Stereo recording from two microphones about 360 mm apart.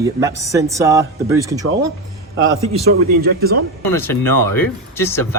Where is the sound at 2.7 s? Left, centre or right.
Right.